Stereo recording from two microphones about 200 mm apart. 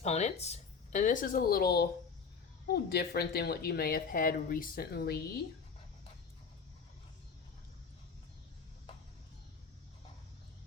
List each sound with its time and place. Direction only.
0.0 s a woman's voice: 35° left (ahead or behind); by 5.2 s 50° left (ahead or behind)